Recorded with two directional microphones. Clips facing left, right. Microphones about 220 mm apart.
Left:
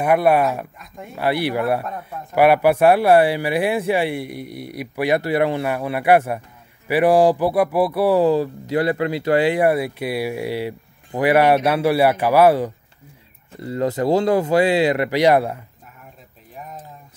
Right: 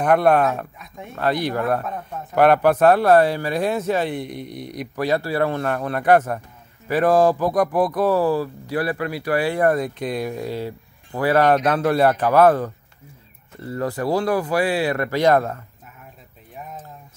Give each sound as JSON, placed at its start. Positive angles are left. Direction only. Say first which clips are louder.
{"t": 0.0, "sound": "speech", "louder": "even", "side_deg": 5}
{"t": 1.2, "sound": "speech", "louder": "left 1 dB", "side_deg": 10}
{"t": 5.0, "sound": "speech", "louder": "left 2 dB", "side_deg": 15}